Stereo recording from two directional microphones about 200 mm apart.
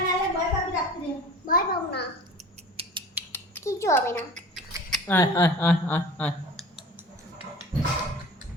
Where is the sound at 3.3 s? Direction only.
15° left (ahead or behind).